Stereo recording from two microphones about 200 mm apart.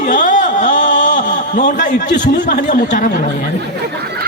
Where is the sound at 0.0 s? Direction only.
40° left (ahead or behind).